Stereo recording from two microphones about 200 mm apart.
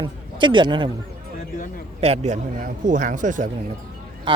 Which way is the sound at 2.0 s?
30° right (ahead or behind).